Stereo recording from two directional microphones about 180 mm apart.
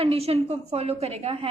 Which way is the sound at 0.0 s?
35° right (ahead or behind).